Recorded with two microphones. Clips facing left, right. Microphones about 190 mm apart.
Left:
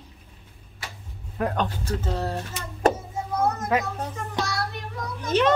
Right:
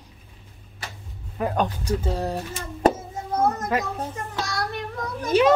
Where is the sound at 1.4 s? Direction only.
10° right (ahead or behind).